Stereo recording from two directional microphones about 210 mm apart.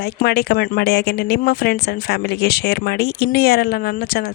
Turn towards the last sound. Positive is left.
turn(degrees=45)  # may be behind; listen again after turning